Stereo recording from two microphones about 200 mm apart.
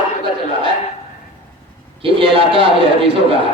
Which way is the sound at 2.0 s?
25° right (ahead or behind).